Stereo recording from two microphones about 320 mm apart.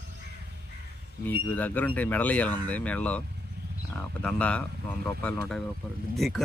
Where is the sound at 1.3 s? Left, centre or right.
Centre.